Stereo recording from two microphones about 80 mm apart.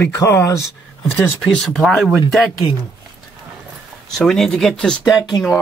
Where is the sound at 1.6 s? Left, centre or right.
Centre.